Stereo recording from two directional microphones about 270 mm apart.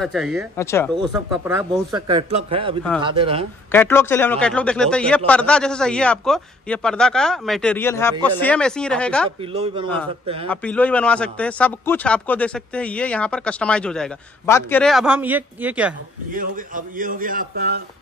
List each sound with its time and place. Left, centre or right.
0.0 s speech: centre
0.6 s speech: centre
1.1 s speech: centre
3.7 s speech: centre
9.4 s speech: centre
10.5 s speech: centre
16.3 s a man's voice: right